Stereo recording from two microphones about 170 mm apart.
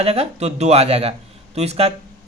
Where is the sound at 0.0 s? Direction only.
35° right (ahead or behind).